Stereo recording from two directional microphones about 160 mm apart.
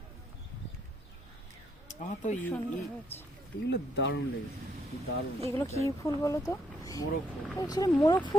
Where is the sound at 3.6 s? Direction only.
90° left.